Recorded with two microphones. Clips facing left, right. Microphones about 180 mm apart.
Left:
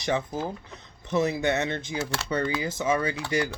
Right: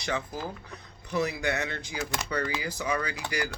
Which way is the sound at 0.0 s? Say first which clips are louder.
Left 5 dB; 20° left (ahead or behind).